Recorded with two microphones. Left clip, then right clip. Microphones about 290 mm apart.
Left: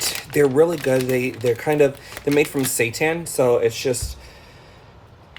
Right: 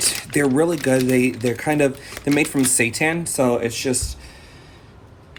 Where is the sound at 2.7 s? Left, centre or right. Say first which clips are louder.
Left 2 dB; right.